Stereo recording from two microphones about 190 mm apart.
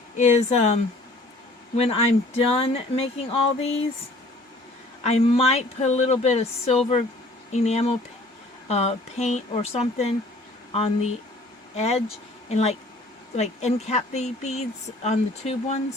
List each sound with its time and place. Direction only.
0.2 s speech: 35° left (ahead or behind)
5.0 s speech: 35° left (ahead or behind)